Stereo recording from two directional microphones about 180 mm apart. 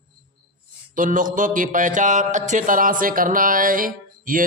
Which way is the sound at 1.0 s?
50° right (ahead or behind).